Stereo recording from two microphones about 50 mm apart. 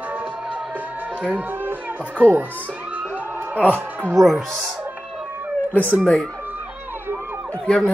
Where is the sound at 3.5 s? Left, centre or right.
Left.